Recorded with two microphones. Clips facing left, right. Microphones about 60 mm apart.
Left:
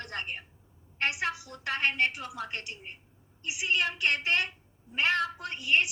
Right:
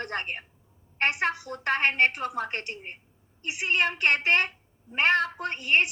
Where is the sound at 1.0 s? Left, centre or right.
Right.